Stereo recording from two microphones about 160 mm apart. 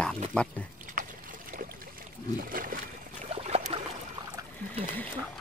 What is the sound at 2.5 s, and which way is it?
Splash, 60° right (ahead or behind).